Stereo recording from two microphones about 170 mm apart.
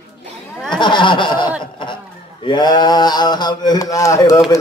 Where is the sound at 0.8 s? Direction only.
30° left (ahead or behind).